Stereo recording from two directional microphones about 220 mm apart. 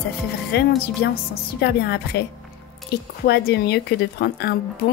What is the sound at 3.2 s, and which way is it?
A woman's voice, 50° left (ahead or behind).